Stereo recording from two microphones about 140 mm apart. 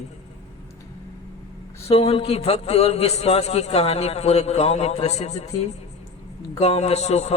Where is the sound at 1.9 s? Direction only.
45° left (ahead or behind).